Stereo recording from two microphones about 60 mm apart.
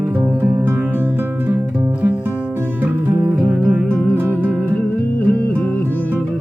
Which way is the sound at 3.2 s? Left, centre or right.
Right.